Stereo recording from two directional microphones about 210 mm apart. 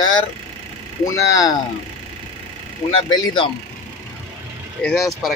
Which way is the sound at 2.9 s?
25° left (ahead or behind).